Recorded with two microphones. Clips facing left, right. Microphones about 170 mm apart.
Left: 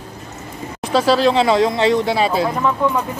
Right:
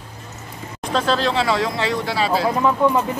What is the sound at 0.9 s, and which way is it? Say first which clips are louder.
Speech: left 5 dB; 10° left (ahead or behind).